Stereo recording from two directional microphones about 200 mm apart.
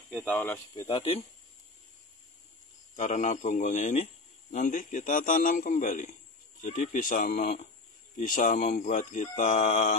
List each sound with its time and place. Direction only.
0.1 s speech: centre (ahead or behind)
0.4 s speech: 10° left (ahead or behind)
0.8 s speech: 25° left (ahead or behind)
3.0 s speech: 35° left (ahead or behind)